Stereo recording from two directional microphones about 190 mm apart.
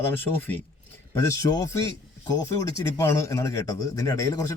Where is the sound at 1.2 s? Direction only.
20° left (ahead or behind).